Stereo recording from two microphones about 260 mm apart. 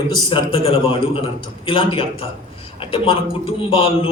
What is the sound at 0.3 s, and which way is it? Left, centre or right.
A man's voice, centre.